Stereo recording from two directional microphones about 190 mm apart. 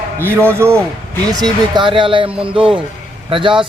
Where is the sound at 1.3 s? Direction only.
20° right (ahead or behind).